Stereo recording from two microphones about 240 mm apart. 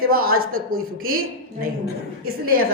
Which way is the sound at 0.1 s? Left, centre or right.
Right.